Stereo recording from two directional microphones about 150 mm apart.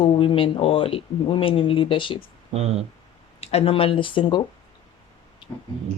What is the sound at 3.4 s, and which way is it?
Speech, 40° left (ahead or behind).